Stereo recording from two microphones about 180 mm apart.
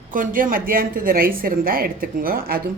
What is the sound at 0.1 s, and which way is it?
A woman's voice, 50° right (ahead or behind).